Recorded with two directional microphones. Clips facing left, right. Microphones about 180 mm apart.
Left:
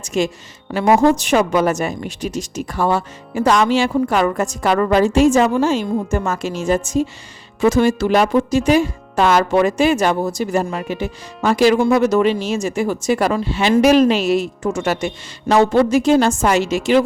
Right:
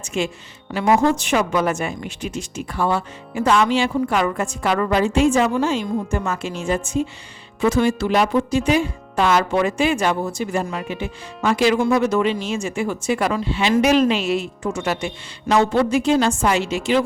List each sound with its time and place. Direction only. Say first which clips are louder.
0.0 s a woman's voice: left 4 dB; 40° left (ahead or behind)